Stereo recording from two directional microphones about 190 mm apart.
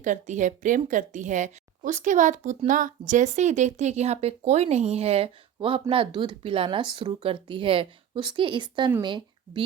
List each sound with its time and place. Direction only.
0.0 s speech: 40° right (ahead or behind); by 9.6 s 25° right (ahead or behind)